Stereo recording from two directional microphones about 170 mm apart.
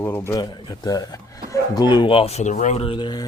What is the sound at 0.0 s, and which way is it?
Speech, 15° left (ahead or behind).